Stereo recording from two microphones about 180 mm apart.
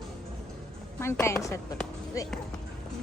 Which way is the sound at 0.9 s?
15° left (ahead or behind).